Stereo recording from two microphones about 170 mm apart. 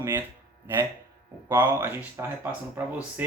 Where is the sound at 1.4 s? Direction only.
15° right (ahead or behind).